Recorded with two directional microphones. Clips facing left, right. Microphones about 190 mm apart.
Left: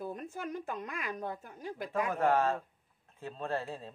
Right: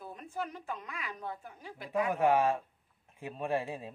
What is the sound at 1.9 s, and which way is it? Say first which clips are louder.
Speech: right 2 dB; 15° right (ahead or behind).